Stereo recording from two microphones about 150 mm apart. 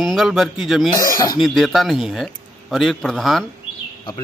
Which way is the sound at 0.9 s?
25° left (ahead or behind).